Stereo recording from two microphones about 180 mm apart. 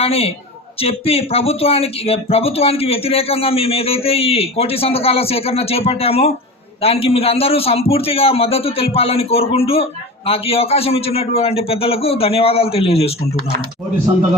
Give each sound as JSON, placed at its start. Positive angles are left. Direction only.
{"t": 0.0, "sound": "a man's voice", "side_deg": 35}